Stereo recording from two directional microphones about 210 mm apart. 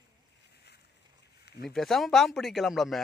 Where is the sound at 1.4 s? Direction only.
50° left (ahead or behind).